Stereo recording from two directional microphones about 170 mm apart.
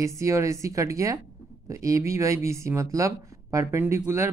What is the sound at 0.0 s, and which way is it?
Speech, 20° right (ahead or behind).